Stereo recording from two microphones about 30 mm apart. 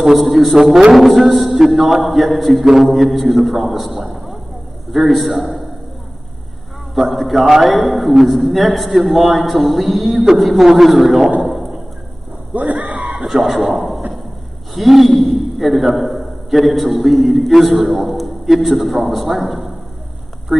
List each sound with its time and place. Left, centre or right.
0.2 s a man's voice: centre
0.6 s a man's voice: centre
0.9 s a man's voice: centre
7.0 s a man's voice: centre
12.5 s a sound: right
13.2 s speech: centre
14.7 s a sound: centre
16.0 s a man's voice: centre